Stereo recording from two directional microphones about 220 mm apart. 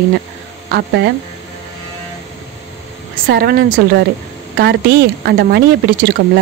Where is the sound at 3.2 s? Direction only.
45° right (ahead or behind).